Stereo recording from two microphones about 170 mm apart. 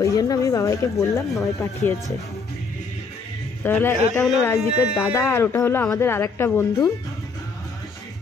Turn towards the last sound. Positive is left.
turn(degrees=15)  # may be behind; listen again after turning